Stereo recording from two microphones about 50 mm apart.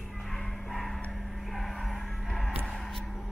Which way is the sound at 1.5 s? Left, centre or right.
Centre.